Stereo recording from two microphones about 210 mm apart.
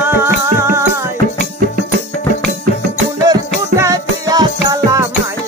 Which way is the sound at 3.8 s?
15° right (ahead or behind).